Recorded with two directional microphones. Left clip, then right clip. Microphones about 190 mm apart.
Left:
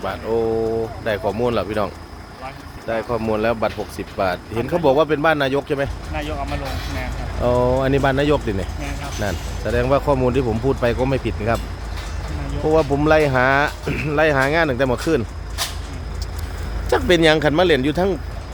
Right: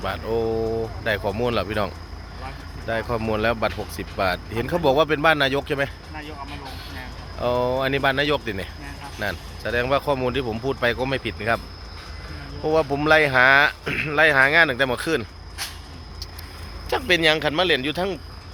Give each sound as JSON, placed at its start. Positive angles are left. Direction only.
{"t": 0.0, "sound": "speech", "side_deg": 10}
{"t": 3.2, "sound": "speech", "side_deg": 5}
{"t": 7.4, "sound": "speech", "side_deg": 5}
{"t": 12.6, "sound": "speech", "side_deg": 0}
{"t": 16.9, "sound": "speech", "side_deg": 20}